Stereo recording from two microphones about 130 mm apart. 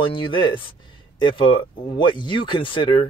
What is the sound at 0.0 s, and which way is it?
Speech, 40° left (ahead or behind).